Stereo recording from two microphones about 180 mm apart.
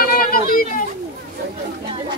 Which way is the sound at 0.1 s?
50° left (ahead or behind).